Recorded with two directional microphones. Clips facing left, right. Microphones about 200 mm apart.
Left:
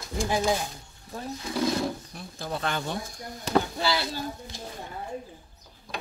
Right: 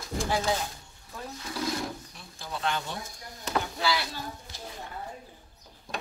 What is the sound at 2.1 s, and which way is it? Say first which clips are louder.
Speech: left 5 dB; 45° left (ahead or behind).